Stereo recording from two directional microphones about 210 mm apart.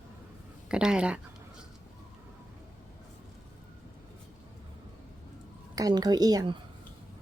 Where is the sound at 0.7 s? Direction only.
5° right (ahead or behind).